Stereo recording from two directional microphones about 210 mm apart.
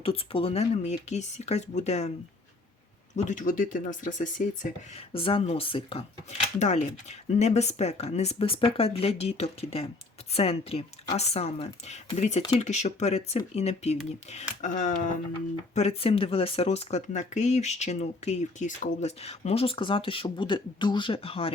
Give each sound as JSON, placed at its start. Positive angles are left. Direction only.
{"t": 0.0, "sound": "speech", "side_deg": 25}
{"t": 3.2, "sound": "speech", "side_deg": 35}
{"t": 5.1, "sound": "speech", "side_deg": 25}